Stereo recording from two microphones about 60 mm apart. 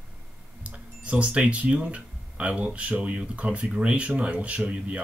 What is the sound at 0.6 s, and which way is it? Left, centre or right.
Speech, right.